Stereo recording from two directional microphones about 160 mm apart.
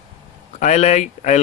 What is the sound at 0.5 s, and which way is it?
Speech, 45° left (ahead or behind).